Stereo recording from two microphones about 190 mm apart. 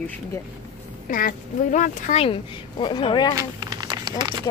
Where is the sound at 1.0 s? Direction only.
45° left (ahead or behind).